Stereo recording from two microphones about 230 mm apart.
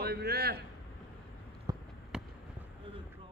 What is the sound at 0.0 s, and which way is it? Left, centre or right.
Speech, right.